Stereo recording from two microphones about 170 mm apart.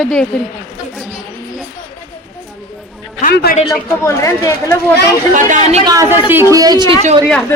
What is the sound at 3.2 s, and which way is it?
Speech, 50° left (ahead or behind).